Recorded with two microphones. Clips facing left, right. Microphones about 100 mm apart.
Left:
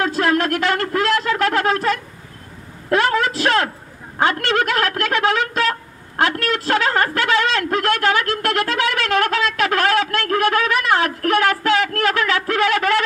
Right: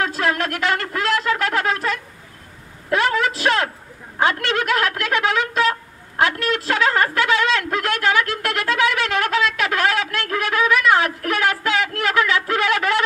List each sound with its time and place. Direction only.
0.0 s a sound: 35° left (ahead or behind)
2.9 s a woman's voice: 35° left (ahead or behind)
6.4 s a woman's voice: 35° left (ahead or behind)